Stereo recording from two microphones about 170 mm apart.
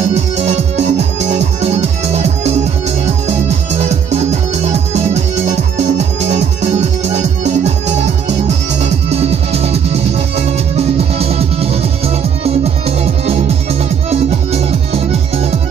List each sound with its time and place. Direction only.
0.1 s music: 40° right (ahead or behind)